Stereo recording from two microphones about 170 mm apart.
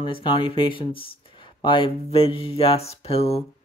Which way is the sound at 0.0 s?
30° left (ahead or behind).